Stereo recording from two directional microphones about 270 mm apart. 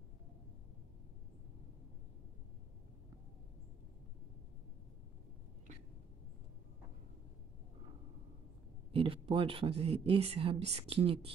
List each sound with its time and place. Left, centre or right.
8.9 s speech: centre